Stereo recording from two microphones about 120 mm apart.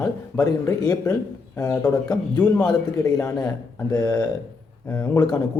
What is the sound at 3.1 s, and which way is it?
A man's voice, 25° left (ahead or behind).